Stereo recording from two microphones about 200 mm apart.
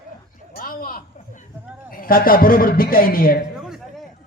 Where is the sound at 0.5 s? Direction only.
45° left (ahead or behind).